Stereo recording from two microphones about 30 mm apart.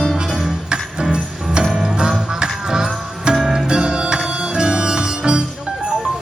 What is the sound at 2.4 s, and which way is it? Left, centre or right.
Music, right.